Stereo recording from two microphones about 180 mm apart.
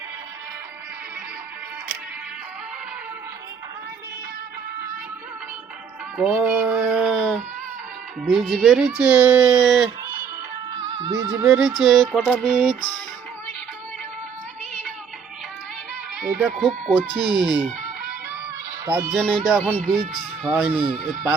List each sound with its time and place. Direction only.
6.1 s speech: 5° right (ahead or behind)
8.2 s music: centre (ahead or behind)
10.8 s music: 25° right (ahead or behind)
11.5 s music: 5° right (ahead or behind)
16.2 s speech: 5° right (ahead or behind)
17.0 s music: centre (ahead or behind)
18.9 s fowl: 20° right (ahead or behind)
19.1 s music: centre (ahead or behind)